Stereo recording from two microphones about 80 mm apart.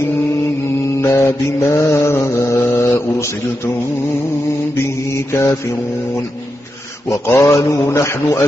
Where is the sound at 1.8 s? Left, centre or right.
Left.